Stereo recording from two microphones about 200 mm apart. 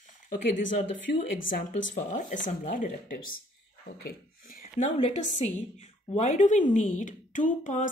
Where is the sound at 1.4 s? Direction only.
40° left (ahead or behind).